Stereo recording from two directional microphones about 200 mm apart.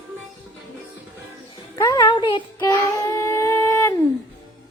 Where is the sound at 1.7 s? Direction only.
20° left (ahead or behind).